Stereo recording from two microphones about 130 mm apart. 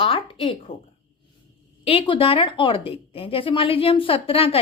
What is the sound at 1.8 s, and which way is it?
A woman's voice, 45° left (ahead or behind).